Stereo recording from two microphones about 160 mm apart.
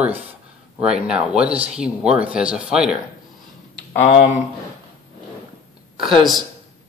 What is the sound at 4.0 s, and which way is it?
Speech, 45° left (ahead or behind).